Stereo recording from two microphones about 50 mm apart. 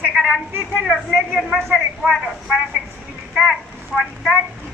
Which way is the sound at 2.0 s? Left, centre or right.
Centre.